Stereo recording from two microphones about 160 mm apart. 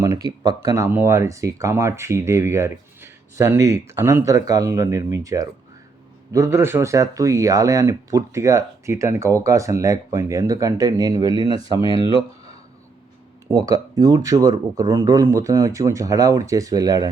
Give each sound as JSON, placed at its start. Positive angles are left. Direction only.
{"t": 0.0, "sound": "speech", "side_deg": -25}
{"t": 13.5, "sound": "speech", "side_deg": -20}